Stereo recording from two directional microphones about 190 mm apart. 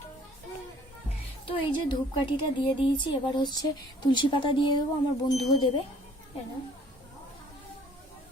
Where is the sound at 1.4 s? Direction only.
25° left (ahead or behind).